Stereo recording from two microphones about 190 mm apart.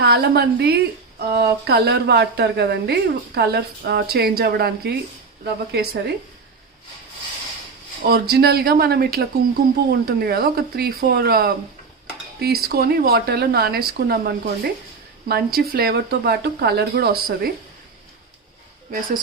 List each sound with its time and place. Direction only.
0.0 s a woman's voice: 55° right (ahead or behind)
8.0 s a woman's voice: 55° right (ahead or behind)